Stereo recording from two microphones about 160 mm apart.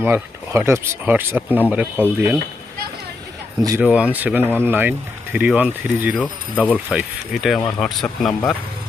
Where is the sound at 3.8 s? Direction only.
10° right (ahead or behind).